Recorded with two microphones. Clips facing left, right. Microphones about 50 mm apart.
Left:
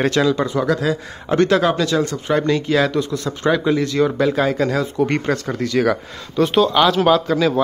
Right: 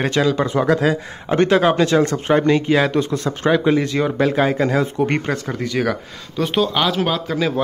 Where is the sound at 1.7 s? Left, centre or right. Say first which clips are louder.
Right 3 dB; right.